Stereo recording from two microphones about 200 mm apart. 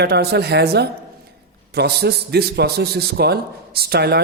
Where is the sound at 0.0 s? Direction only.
55° right (ahead or behind).